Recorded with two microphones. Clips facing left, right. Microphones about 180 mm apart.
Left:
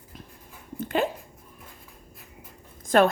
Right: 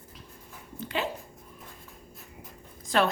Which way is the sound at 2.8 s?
50° left (ahead or behind).